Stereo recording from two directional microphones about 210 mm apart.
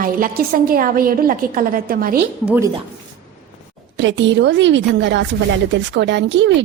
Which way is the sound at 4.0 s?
60° right (ahead or behind).